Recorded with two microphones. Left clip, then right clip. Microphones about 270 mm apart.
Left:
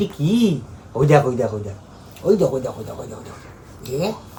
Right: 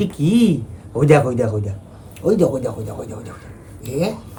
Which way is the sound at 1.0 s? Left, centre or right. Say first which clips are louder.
Right 1 dB; centre.